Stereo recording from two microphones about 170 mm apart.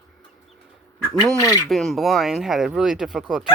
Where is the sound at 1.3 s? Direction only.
20° left (ahead or behind).